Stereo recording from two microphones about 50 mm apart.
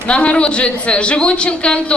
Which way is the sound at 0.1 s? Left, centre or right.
Left.